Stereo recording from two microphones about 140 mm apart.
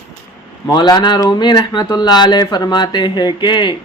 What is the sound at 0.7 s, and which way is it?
Speech, 30° left (ahead or behind).